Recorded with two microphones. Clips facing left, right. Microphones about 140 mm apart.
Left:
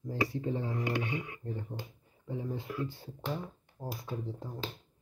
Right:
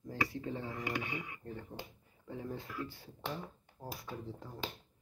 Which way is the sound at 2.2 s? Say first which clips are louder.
Left 5 dB; 20° left (ahead or behind).